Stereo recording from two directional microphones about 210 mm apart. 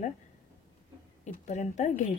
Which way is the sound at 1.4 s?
35° left (ahead or behind).